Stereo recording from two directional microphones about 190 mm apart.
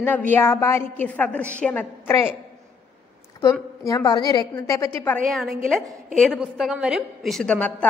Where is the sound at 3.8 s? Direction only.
20° left (ahead or behind).